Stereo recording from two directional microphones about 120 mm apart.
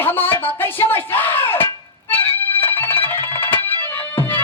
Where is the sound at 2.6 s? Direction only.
15° left (ahead or behind).